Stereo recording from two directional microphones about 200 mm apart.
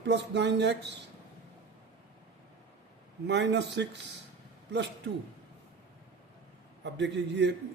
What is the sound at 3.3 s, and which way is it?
Speech, 60° right (ahead or behind).